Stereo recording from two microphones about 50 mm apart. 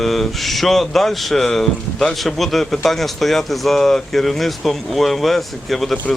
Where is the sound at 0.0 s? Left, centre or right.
Centre.